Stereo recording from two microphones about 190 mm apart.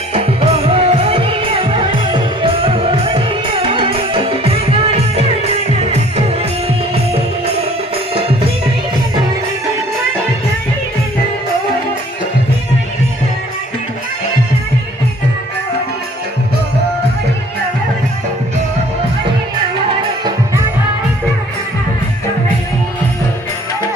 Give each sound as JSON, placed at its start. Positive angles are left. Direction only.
{"t": 0.1, "sound": "music", "side_deg": -30}